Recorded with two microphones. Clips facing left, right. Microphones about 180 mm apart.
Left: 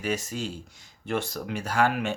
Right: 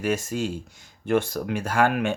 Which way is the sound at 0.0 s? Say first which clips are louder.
Right 5 dB; 50° right (ahead or behind).